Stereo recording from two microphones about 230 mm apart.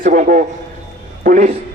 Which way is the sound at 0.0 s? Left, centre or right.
Right.